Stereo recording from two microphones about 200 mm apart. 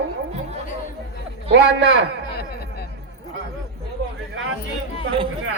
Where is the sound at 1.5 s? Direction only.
70° right (ahead or behind).